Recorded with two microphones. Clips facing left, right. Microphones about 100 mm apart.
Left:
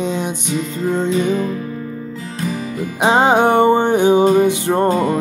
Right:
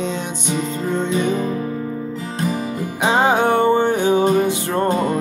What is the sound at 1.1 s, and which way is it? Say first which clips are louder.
Music: left 2 dB; 30° right (ahead or behind).